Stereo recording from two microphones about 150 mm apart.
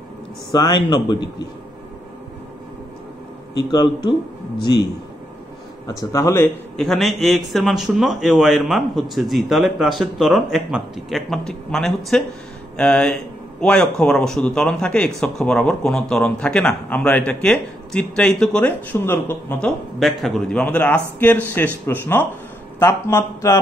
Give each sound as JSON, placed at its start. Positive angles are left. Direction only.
{"t": 0.5, "sound": "a man's voice", "side_deg": 25}
{"t": 3.5, "sound": "a man's voice", "side_deg": 30}
{"t": 5.9, "sound": "a man's voice", "side_deg": 20}
{"t": 6.8, "sound": "a man's voice", "side_deg": 0}
{"t": 20.0, "sound": "a man's voice", "side_deg": 0}